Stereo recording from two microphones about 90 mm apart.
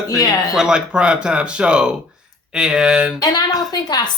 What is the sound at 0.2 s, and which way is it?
Speech, 45° left (ahead or behind).